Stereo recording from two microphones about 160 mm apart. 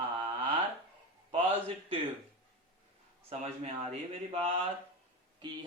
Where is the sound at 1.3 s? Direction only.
35° right (ahead or behind).